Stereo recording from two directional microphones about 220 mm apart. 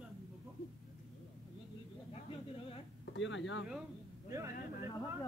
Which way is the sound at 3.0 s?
55° left (ahead or behind).